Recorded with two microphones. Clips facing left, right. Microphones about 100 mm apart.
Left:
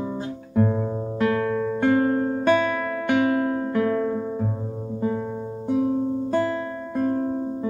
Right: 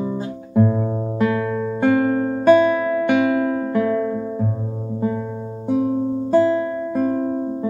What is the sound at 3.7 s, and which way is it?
Music, 15° right (ahead or behind).